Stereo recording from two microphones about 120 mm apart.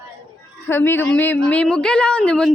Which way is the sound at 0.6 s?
20° left (ahead or behind).